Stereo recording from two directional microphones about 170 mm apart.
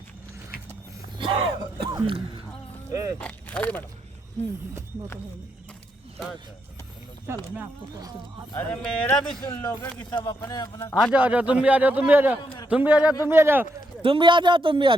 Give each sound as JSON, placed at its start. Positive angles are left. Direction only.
{"t": 1.2, "sound": "throat clearing", "side_deg": -30}
{"t": 1.9, "sound": "a sound", "side_deg": -20}
{"t": 2.9, "sound": "speech", "side_deg": -20}
{"t": 3.2, "sound": "speech", "side_deg": 5}
{"t": 7.3, "sound": "a man's voice", "side_deg": -15}
{"t": 8.5, "sound": "speech", "side_deg": 5}
{"t": 10.1, "sound": "a man's voice", "side_deg": 25}
{"t": 10.9, "sound": "a man's voice", "side_deg": -5}
{"t": 14.0, "sound": "speech", "side_deg": -30}